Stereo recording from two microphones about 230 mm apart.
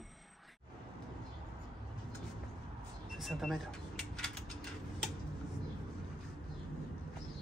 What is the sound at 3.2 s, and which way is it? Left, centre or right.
Speech, centre.